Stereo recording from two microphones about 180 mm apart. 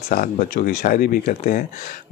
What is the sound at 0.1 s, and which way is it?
Speech, 50° left (ahead or behind).